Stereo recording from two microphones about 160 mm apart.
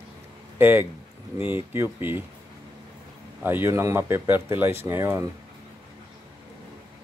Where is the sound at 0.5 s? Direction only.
15° right (ahead or behind).